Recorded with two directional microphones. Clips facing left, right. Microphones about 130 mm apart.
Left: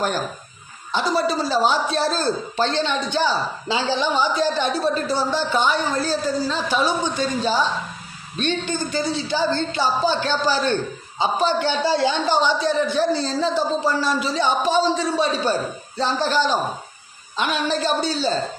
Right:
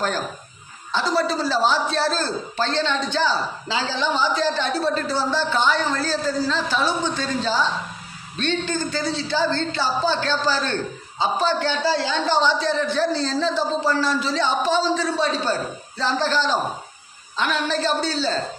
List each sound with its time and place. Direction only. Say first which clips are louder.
0.9 s a man's voice: left 1 dB; 15° left (ahead or behind)